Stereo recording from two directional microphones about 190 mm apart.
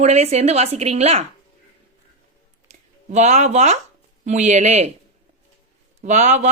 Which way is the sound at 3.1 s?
35° right (ahead or behind).